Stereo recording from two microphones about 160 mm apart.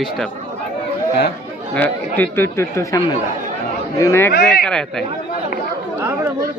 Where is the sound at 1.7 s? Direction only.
10° left (ahead or behind).